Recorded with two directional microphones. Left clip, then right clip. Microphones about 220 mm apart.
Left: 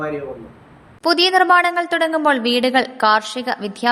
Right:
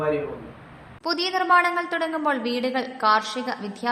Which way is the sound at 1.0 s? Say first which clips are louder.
Left 10 dB; 30° left (ahead or behind).